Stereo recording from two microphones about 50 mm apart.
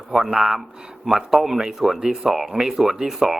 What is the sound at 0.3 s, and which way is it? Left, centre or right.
Speech, centre.